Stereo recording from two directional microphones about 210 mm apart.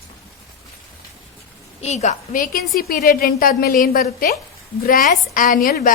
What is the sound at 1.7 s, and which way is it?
A woman's voice, 30° left (ahead or behind).